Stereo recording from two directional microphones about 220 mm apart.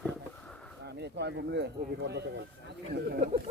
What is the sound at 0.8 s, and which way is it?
Speech, 50° right (ahead or behind).